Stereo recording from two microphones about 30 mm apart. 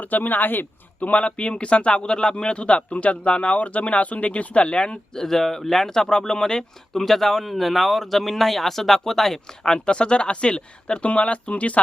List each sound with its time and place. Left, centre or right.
0.0 s speech: left
1.1 s a man's voice: left
5.1 s speech: centre
5.9 s speech: left
9.6 s speech: left
11.0 s a man's voice: left